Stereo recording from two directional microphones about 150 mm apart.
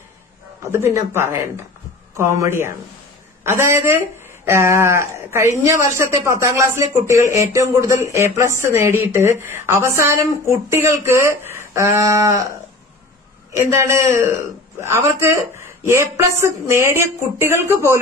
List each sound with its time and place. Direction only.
0.6 s speech: 15° right (ahead or behind)
13.7 s speech: 20° right (ahead or behind)